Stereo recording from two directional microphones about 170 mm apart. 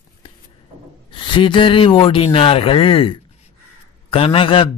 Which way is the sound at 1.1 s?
30° left (ahead or behind).